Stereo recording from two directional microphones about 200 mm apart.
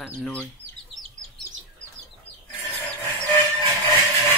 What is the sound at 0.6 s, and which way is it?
Chicken, 80° right.